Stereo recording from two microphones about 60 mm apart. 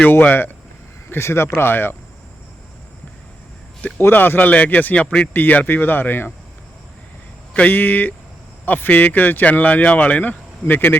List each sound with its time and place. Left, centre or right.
0.1 s speech: left
1.1 s speech: left
3.9 s speech: left
7.5 s speech: left